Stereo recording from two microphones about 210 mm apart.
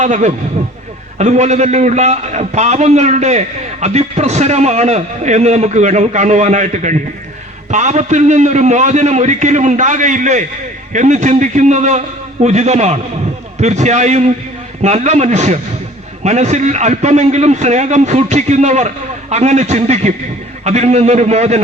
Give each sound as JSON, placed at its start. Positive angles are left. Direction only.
{"t": 0.0, "sound": "a man's voice", "side_deg": -35}